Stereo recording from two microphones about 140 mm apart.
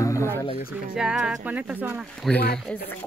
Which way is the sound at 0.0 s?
20° left (ahead or behind).